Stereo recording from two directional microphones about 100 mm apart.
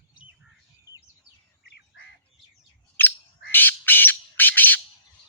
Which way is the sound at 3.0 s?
20° left (ahead or behind).